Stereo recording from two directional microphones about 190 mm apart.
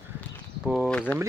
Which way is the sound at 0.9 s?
5° left (ahead or behind).